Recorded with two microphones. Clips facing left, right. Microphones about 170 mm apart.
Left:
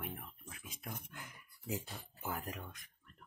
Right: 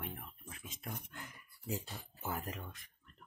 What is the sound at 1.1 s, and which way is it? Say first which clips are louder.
Speech: right 1 dB; 15° left (ahead or behind).